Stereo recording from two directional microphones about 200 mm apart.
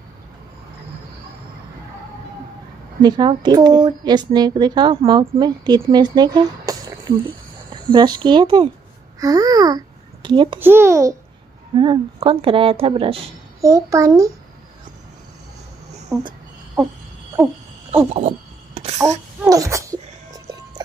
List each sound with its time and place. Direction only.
3.0 s a woman's voice: 20° right (ahead or behind)
10.6 s a child's voice: 10° right (ahead or behind)
11.7 s a woman's voice: 25° right (ahead or behind)
16.1 s a sound: 15° right (ahead or behind)
17.4 s a sound: centre (ahead or behind)
17.9 s a woman's voice: 30° right (ahead or behind)
19.5 s speech: 15° right (ahead or behind)